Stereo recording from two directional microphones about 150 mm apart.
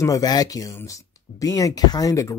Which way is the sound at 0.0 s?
25° left (ahead or behind).